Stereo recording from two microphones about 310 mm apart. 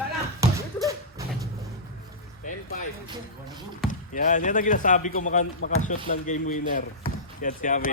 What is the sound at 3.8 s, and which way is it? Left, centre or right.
Speech, left.